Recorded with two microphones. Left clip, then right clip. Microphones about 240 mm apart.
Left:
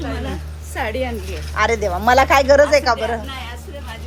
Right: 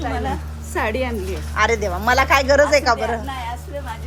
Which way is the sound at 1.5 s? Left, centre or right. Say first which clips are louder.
Left 1 dB; centre.